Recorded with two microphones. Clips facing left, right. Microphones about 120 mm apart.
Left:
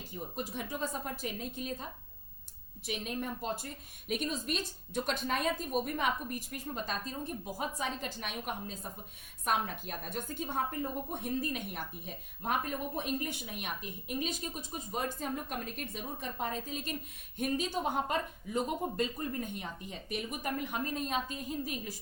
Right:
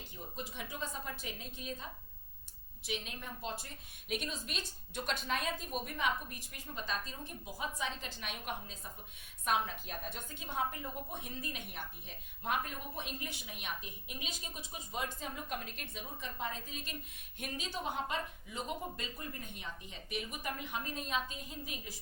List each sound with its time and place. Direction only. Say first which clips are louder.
0.3 s a woman's voice: left 5 dB; 45° left (ahead or behind)